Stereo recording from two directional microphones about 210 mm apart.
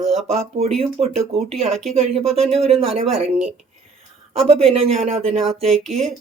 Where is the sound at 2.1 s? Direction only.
30° right (ahead or behind).